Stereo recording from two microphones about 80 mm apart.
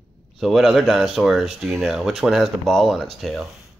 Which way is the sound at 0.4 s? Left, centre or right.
Centre.